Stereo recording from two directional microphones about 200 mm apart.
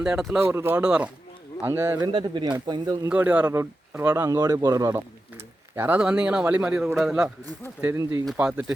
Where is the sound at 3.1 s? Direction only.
10° right (ahead or behind).